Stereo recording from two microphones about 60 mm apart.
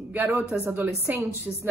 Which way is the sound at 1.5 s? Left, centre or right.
Centre.